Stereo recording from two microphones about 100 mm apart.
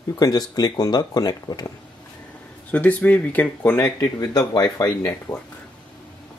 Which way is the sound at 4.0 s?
45° left (ahead or behind).